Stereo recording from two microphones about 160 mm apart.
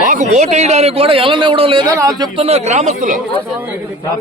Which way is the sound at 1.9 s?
20° right (ahead or behind).